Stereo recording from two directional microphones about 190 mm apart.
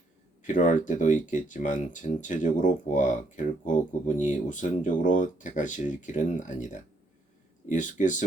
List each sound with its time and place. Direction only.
0.4 s speech: 40° left (ahead or behind)
7.7 s speech: 40° left (ahead or behind)